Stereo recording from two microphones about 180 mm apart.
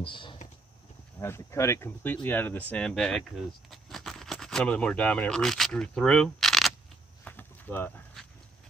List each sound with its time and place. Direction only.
0.0 s speech: 25° left (ahead or behind)
1.2 s speech: 15° left (ahead or behind)
7.2 s a sound: 10° left (ahead or behind)